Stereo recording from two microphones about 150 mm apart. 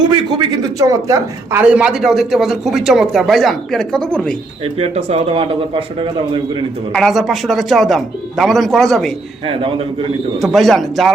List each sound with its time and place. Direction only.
0.0 s a man's voice: 30° right (ahead or behind)
1.6 s a man's voice: 5° right (ahead or behind)
4.6 s a man's voice: 45° right (ahead or behind)
6.9 s a man's voice: centre (ahead or behind)
9.5 s a man's voice: 40° right (ahead or behind)
10.4 s a man's voice: centre (ahead or behind)